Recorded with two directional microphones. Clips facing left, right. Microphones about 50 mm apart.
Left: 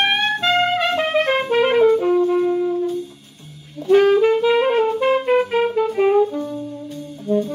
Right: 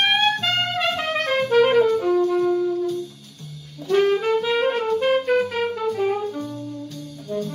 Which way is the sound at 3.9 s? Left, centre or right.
Left.